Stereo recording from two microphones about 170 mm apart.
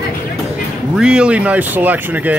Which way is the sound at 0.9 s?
5° right (ahead or behind).